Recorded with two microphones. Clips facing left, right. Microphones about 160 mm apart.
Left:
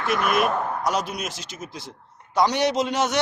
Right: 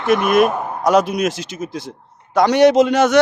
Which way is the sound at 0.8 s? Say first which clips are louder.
Right 11 dB; 60° right (ahead or behind).